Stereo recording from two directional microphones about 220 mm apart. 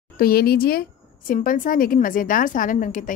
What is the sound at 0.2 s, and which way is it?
A woman's voice, 45° left (ahead or behind).